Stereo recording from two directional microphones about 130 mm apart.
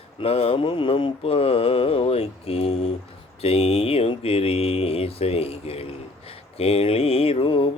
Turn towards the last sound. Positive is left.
turn(degrees=45)  # may be behind; listen again after turning